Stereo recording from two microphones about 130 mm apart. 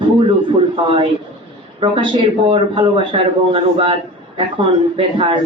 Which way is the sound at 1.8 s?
40° right (ahead or behind).